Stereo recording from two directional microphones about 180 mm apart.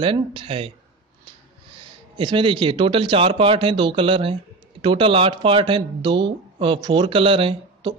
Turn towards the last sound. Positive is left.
turn(degrees=-30)  # may be behind; listen again after turning